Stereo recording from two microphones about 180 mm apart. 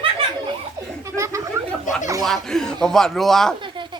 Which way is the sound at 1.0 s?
15° right (ahead or behind).